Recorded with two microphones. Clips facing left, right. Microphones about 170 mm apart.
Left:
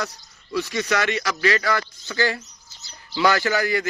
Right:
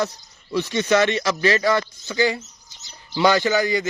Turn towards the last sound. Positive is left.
turn(degrees=-20)  # may be behind; listen again after turning